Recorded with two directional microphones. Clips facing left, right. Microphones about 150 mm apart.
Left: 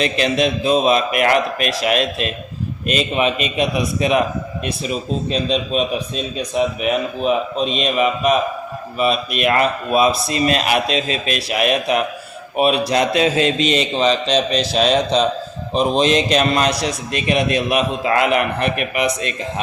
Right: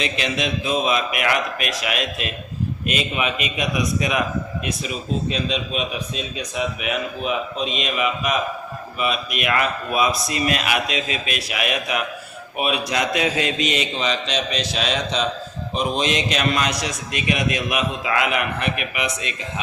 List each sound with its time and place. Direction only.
0.0 s a man's voice: 40° left (ahead or behind)